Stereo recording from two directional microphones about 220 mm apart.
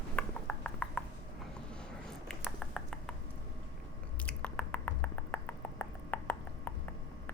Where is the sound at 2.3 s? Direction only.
Centre (ahead or behind).